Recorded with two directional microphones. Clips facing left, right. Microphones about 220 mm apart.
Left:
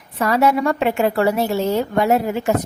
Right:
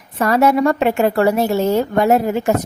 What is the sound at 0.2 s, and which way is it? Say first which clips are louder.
A woman's voice: right 3 dB; 45° right (ahead or behind).